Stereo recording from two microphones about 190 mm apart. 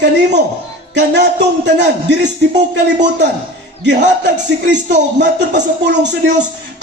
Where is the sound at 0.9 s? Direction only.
65° right (ahead or behind).